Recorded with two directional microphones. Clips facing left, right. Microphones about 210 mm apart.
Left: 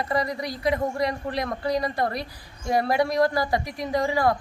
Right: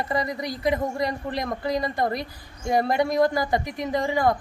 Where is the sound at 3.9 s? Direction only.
20° right (ahead or behind).